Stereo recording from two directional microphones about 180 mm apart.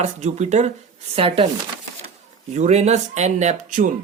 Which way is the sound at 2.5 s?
40° right (ahead or behind).